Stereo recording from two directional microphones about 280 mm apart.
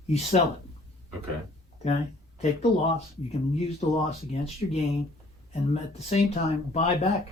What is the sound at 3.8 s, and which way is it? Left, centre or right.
Speech, left.